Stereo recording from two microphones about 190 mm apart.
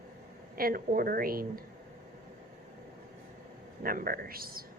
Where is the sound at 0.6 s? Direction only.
50° right (ahead or behind).